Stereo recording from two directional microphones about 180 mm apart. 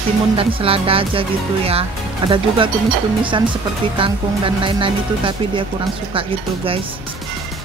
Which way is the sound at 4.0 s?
30° right (ahead or behind).